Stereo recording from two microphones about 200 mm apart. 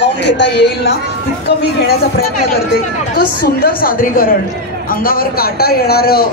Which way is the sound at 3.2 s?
50° left (ahead or behind).